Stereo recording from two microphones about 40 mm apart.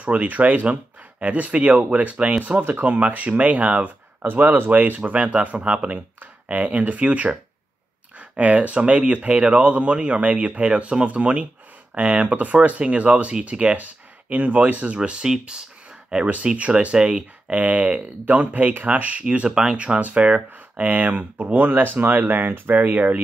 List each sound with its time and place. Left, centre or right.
0.0 s speech: right
2.6 s speech: right
14.3 s speech: right
15.0 s speech: right
20.0 s speech: right
21.6 s speech: right